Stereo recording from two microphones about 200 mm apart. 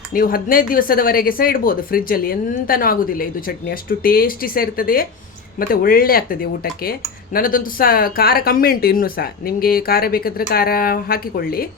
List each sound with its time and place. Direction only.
0.1 s speech: 45° left (ahead or behind)